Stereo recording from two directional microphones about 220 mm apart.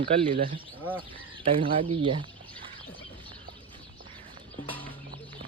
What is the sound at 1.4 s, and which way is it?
Speech, 25° right (ahead or behind).